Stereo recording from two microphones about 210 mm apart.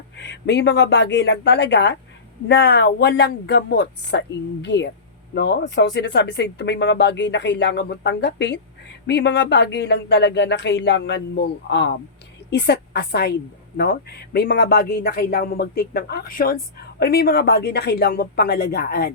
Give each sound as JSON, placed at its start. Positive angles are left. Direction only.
{"t": 0.2, "sound": "a man's voice", "side_deg": 55}